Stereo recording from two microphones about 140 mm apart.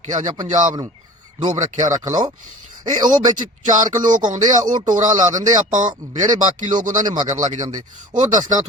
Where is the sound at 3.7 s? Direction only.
65° right (ahead or behind).